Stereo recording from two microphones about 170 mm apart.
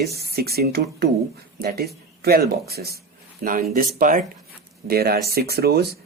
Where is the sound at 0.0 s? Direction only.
65° right (ahead or behind).